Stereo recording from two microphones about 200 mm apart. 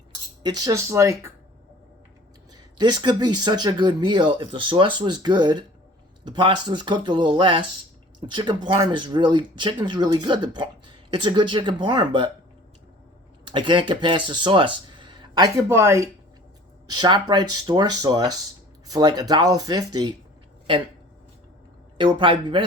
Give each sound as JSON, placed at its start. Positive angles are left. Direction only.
{"t": 0.4, "sound": "speech", "side_deg": -20}
{"t": 2.7, "sound": "speech", "side_deg": -20}
{"t": 13.4, "sound": "speech", "side_deg": -25}
{"t": 21.9, "sound": "speech", "side_deg": -25}